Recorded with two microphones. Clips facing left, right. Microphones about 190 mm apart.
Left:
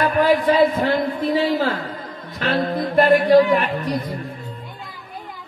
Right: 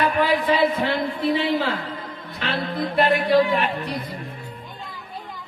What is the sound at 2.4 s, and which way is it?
Music, 45° left (ahead or behind).